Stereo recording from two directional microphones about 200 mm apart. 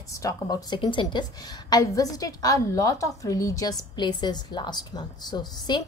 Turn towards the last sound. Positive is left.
turn(degrees=20)  # may be behind; listen again after turning